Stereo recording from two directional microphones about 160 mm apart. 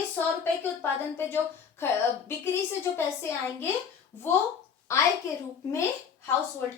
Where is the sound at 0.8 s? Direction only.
15° left (ahead or behind).